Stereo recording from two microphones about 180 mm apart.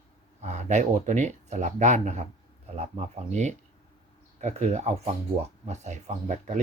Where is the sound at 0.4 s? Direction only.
40° right (ahead or behind).